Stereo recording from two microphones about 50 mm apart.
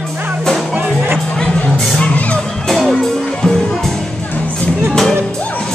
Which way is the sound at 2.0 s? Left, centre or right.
Left.